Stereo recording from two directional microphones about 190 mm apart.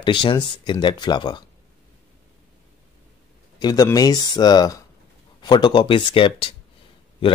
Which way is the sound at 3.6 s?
20° left (ahead or behind).